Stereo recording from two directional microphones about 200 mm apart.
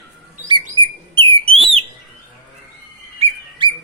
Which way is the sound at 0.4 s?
25° right (ahead or behind).